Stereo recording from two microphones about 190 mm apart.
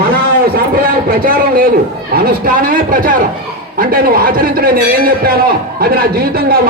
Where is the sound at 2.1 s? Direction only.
50° right (ahead or behind).